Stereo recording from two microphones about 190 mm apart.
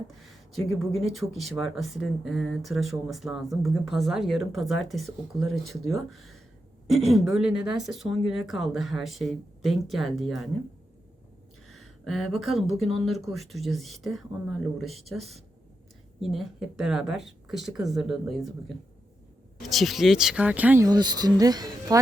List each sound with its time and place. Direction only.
0.2 s speech: centre (ahead or behind)
11.7 s speech: centre (ahead or behind)
12.7 s speech: 30° right (ahead or behind)
13.3 s speech: centre (ahead or behind)
16.2 s speech: centre (ahead or behind)
19.6 s speech: centre (ahead or behind)
20.8 s speech: 20° right (ahead or behind)